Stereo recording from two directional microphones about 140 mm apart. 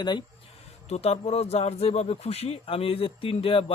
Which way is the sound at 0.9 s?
50° left (ahead or behind).